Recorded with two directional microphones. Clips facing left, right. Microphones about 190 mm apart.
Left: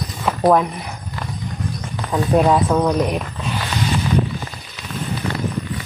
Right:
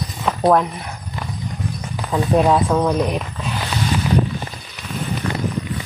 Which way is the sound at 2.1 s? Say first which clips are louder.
Even; centre (ahead or behind).